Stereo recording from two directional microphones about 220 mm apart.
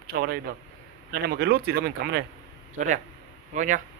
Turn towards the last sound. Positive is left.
turn(degrees=-35)  # may be behind; listen again after turning